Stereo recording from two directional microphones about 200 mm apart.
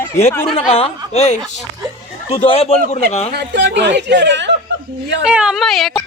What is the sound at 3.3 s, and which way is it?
Speech, 60° right (ahead or behind).